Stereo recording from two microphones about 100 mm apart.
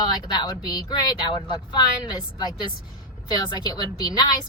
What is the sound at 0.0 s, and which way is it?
A woman's voice, 45° left (ahead or behind).